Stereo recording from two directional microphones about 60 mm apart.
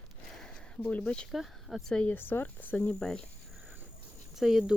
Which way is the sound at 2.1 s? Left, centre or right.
Left.